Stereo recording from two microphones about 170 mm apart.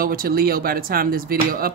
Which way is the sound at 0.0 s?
60° right (ahead or behind).